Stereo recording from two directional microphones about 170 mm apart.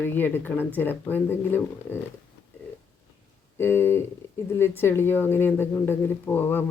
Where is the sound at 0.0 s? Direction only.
10° left (ahead or behind).